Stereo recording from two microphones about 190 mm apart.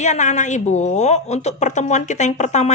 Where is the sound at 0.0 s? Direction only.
40° left (ahead or behind).